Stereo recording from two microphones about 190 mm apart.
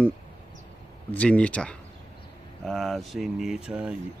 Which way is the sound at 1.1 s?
5° left (ahead or behind).